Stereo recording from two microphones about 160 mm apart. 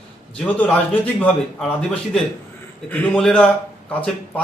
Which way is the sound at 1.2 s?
10° left (ahead or behind).